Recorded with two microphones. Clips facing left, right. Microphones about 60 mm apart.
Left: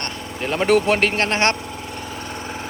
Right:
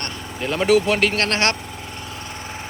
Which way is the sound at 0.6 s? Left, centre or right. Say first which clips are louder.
Even; left.